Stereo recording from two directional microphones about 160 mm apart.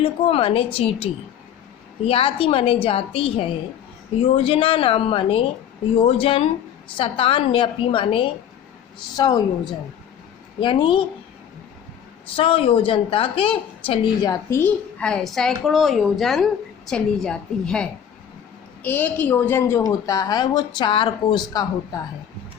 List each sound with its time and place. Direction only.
0.0 s a woman's voice: 35° left (ahead or behind)
10.6 s a woman's voice: 30° left (ahead or behind)
12.4 s a woman's voice: 35° left (ahead or behind)
14.6 s a woman's voice: 5° left (ahead or behind); by 21.7 s 25° left (ahead or behind)